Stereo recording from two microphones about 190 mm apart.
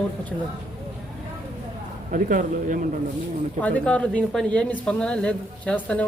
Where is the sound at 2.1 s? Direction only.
45° right (ahead or behind).